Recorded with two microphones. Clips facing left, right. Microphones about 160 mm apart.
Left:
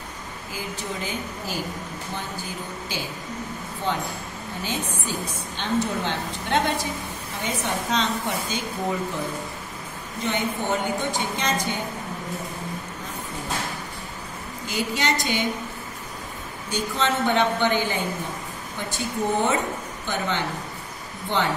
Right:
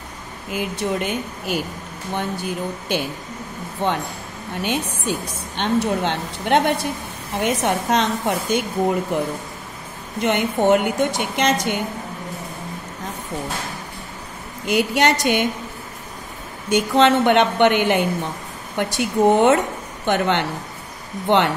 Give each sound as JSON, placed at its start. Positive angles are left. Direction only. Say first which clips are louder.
{"t": 0.5, "sound": "a woman's voice", "louder": "right 9 dB", "side_deg": -70}
{"t": 10.2, "sound": "speech", "louder": "right 8 dB", "side_deg": -75}
{"t": 14.7, "sound": "a woman's voice", "louder": "right 8 dB", "side_deg": -65}
{"t": 16.7, "sound": "speech", "louder": "right 9 dB", "side_deg": -65}
{"t": 20.1, "sound": "speech", "louder": "right 8 dB", "side_deg": -65}